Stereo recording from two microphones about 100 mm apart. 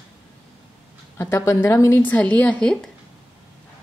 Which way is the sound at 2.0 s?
15° left (ahead or behind).